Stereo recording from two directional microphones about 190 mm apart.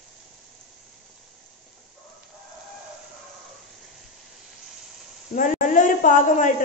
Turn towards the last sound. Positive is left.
turn(degrees=45)  # may be behind; listen again after turning